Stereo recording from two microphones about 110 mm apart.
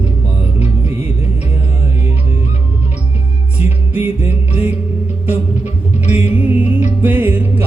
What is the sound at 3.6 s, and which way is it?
Music, 15° right (ahead or behind).